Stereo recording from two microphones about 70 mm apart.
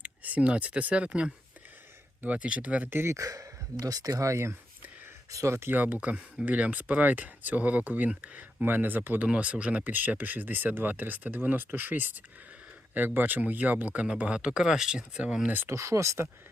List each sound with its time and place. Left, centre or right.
0.0 s speech: right
3.0 s speech: right
5.7 s speech: right
15.7 s speech: right